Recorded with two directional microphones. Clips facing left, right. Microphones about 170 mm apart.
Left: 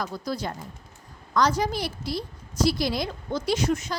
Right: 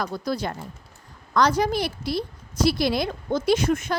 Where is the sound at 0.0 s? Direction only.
65° right (ahead or behind).